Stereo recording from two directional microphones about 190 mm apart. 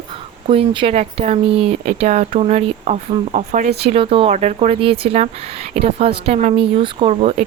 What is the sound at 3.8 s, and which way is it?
Speech, 30° right (ahead or behind).